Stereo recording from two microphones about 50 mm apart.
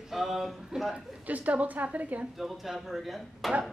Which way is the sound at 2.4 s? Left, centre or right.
Centre.